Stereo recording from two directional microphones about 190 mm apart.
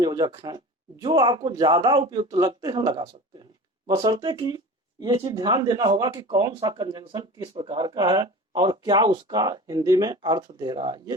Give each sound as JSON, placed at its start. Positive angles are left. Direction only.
{"t": 0.0, "sound": "speech", "side_deg": -20}